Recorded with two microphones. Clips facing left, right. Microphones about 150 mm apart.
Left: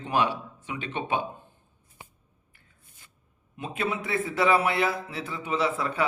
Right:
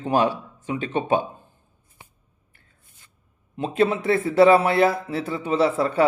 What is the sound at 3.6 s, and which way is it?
A man's voice, 35° right (ahead or behind).